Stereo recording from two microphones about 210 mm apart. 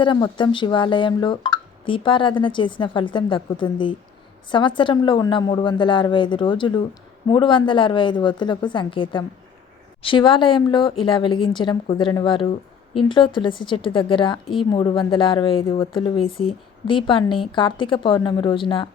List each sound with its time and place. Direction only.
0.0 s a woman's voice: 20° left (ahead or behind)